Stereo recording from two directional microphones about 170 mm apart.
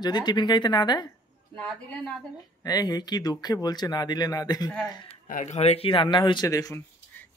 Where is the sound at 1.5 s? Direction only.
5° left (ahead or behind).